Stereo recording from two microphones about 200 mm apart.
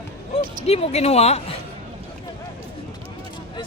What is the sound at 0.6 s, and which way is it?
Speech, 30° left (ahead or behind).